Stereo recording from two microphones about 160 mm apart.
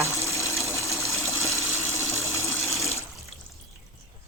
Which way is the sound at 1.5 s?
15° left (ahead or behind).